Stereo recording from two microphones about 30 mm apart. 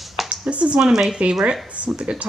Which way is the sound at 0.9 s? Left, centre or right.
Right.